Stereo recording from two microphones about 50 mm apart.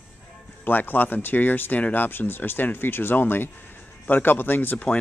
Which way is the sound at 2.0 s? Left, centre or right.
Left.